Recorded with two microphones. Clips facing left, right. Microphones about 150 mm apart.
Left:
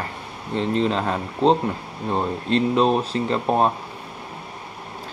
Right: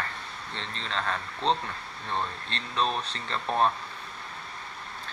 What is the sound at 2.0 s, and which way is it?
Speech, 40° left (ahead or behind).